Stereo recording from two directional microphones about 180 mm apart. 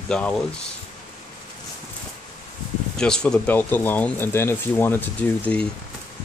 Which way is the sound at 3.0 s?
5° left (ahead or behind).